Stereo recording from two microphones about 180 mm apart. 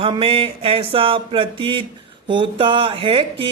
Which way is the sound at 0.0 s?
30° right (ahead or behind).